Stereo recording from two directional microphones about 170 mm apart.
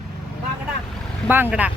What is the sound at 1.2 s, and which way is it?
Speech, 10° right (ahead or behind).